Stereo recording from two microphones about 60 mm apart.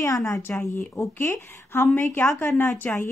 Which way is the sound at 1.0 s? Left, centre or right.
Left.